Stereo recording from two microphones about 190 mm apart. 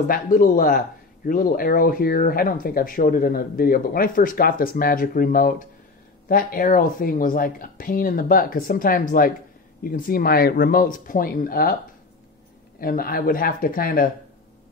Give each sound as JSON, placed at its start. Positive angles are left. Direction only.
{"t": 0.1, "sound": "speech", "side_deg": 45}
{"t": 12.8, "sound": "speech", "side_deg": 50}